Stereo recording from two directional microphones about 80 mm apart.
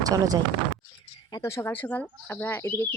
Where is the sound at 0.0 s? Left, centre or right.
Right.